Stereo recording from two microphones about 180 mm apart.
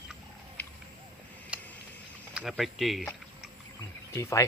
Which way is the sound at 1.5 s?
5° right (ahead or behind).